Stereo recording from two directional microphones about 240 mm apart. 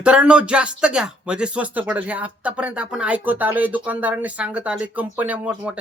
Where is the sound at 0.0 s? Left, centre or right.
Centre.